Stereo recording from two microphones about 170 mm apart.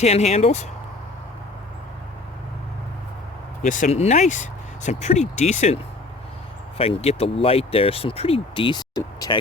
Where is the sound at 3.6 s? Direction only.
45° left (ahead or behind).